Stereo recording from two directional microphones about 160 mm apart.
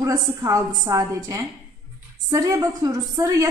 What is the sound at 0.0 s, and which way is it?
A woman's voice, 20° right (ahead or behind).